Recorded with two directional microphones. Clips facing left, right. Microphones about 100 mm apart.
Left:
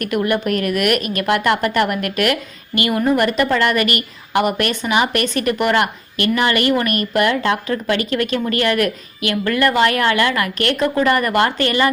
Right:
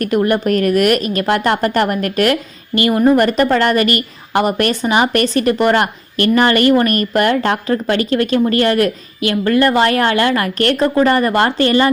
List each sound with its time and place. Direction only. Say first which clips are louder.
0.0 s a woman's voice: right 4 dB; 35° right (ahead or behind)